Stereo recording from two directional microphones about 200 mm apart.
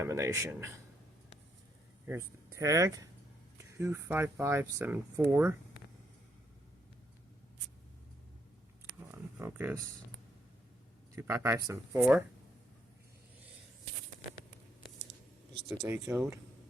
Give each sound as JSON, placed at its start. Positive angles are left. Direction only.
{"t": 0.0, "sound": "speech", "side_deg": -15}
{"t": 2.0, "sound": "speech", "side_deg": -15}
{"t": 9.1, "sound": "speech", "side_deg": -10}
{"t": 11.1, "sound": "speech", "side_deg": -10}
{"t": 15.9, "sound": "speech", "side_deg": -15}